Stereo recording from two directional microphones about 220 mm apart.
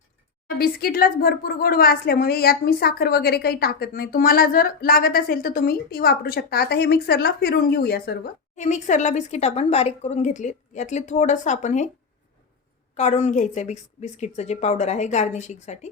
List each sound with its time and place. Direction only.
0.6 s a woman's voice: 40° left (ahead or behind)
12.9 s speech: 30° left (ahead or behind)